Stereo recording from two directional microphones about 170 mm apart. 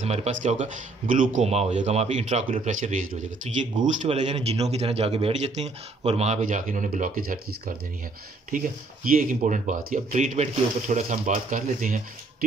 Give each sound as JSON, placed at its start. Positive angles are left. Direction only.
{"t": 0.0, "sound": "speech", "side_deg": -40}